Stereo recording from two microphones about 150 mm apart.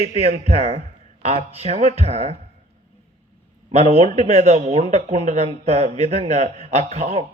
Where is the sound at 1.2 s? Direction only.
45° right (ahead or behind).